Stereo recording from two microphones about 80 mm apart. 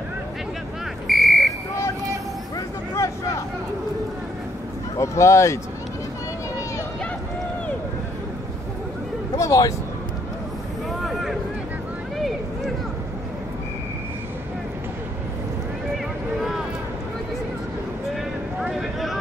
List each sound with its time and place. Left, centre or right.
1.0 s buzzer: centre
4.9 s speech: left
9.4 s speech: left
16.3 s vehicle: centre
18.6 s a sound: centre